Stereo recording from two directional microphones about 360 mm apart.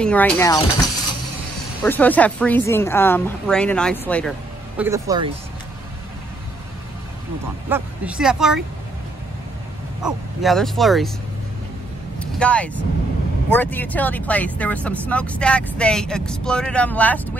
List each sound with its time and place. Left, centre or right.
0.0 s speech: centre
1.8 s speech: centre
4.7 s speech: centre
7.7 s speech: centre
10.0 s speech: centre
12.2 s speech: centre